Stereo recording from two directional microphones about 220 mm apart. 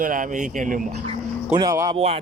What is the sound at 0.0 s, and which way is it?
Speech, 35° right (ahead or behind).